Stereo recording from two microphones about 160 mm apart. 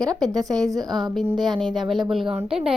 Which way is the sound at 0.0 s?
25° right (ahead or behind).